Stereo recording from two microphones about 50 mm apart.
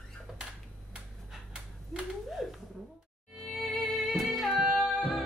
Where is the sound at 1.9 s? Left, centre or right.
Centre.